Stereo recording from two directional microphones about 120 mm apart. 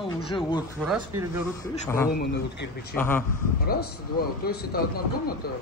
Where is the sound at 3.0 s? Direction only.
20° left (ahead or behind).